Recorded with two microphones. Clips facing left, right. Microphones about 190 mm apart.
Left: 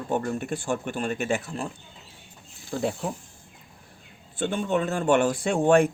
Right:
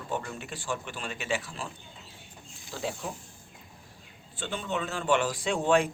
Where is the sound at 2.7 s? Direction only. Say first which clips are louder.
Left 7 dB; 55° left (ahead or behind).